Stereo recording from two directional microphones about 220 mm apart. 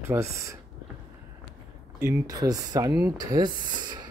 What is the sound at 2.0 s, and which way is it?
Speech, 15° right (ahead or behind).